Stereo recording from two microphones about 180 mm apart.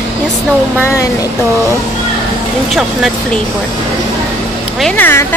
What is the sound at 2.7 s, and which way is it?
Speech, 5° left (ahead or behind).